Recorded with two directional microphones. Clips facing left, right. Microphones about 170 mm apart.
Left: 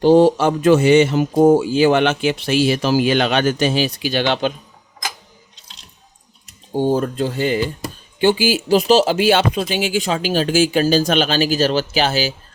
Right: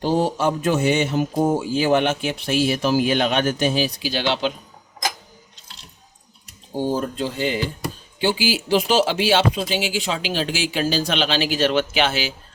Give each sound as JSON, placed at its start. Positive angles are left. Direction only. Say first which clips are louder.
{"t": 0.0, "sound": "speech", "louder": "left 8 dB", "side_deg": 80}
{"t": 6.8, "sound": "speech", "louder": "left 5 dB", "side_deg": 60}